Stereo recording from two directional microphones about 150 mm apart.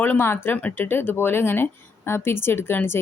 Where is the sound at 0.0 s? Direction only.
15° left (ahead or behind).